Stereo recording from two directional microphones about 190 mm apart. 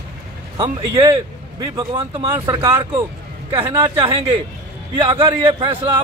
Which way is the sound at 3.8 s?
25° right (ahead or behind).